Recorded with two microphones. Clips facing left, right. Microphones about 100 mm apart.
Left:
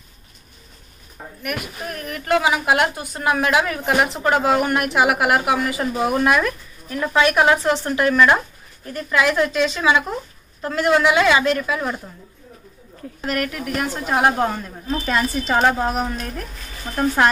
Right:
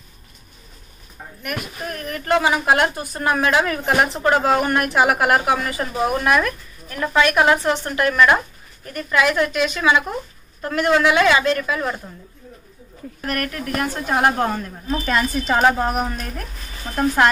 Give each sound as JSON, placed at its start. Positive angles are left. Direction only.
{"t": 1.4, "sound": "a woman's voice", "side_deg": 10}
{"t": 8.1, "sound": "speech", "side_deg": 0}
{"t": 8.8, "sound": "a woman's voice", "side_deg": 15}
{"t": 13.2, "sound": "a woman's voice", "side_deg": 15}
{"t": 15.4, "sound": "speech", "side_deg": -5}